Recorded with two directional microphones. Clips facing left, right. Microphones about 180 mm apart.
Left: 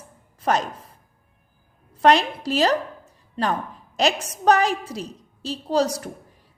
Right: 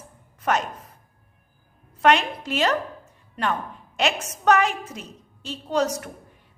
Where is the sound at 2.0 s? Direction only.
35° left (ahead or behind).